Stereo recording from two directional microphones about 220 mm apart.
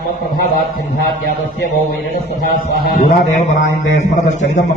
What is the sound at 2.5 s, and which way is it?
A man's voice, 35° left (ahead or behind).